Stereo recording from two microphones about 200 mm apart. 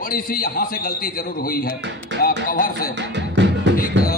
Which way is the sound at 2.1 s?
65° right (ahead or behind).